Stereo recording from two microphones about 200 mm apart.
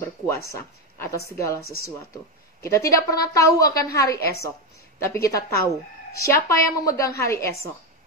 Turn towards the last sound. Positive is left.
turn(degrees=15)  # may be behind; listen again after turning